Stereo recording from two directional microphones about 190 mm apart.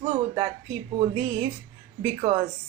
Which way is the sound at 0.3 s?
30° right (ahead or behind).